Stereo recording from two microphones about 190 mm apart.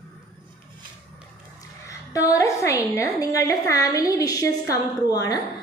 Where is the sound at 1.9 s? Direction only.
15° left (ahead or behind).